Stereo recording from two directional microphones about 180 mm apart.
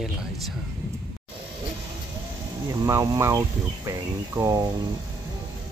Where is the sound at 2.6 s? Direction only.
20° right (ahead or behind).